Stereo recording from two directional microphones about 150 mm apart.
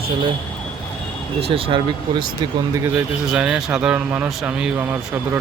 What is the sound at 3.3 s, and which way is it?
A man's voice, 5° right (ahead or behind).